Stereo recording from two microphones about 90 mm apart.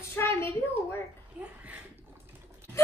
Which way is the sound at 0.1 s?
25° left (ahead or behind).